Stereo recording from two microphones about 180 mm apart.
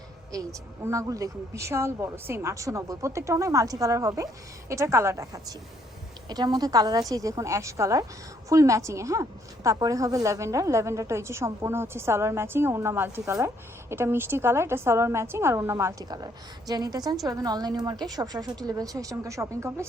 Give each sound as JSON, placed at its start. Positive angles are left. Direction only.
{"t": 0.3, "sound": "a woman's voice", "side_deg": -15}